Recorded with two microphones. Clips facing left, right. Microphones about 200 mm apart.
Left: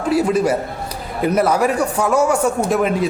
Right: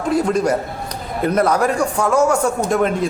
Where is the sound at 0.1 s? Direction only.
5° left (ahead or behind).